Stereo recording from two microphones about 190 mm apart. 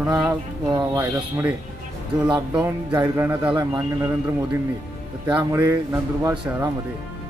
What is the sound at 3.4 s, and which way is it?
Speech, 25° right (ahead or behind).